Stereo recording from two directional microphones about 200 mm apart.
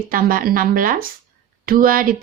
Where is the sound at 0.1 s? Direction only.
45° right (ahead or behind).